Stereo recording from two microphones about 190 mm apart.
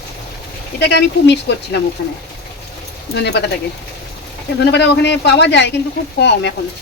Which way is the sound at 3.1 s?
60° left (ahead or behind).